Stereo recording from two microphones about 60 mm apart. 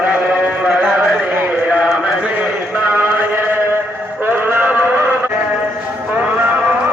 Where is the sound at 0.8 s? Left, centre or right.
Right.